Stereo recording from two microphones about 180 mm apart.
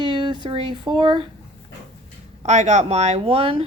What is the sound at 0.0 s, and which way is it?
Speech, 25° right (ahead or behind).